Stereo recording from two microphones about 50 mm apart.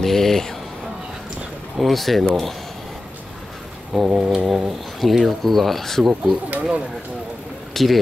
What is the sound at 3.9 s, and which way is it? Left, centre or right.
Speech, centre.